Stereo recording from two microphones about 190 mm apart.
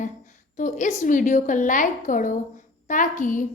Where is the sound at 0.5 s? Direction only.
40° left (ahead or behind).